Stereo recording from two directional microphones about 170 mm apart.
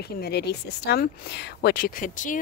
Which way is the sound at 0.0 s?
70° left (ahead or behind).